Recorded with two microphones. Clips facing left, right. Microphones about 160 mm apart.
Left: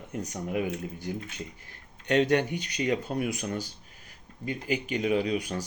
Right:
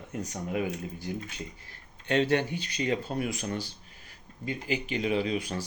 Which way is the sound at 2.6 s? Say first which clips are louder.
Left 1 dB; 40° right (ahead or behind).